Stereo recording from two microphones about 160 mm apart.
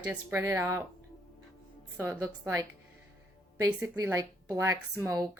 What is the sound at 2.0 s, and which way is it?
A woman's voice, 15° right (ahead or behind).